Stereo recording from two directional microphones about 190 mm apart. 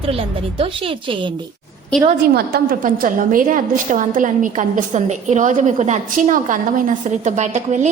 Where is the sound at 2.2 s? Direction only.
55° right (ahead or behind).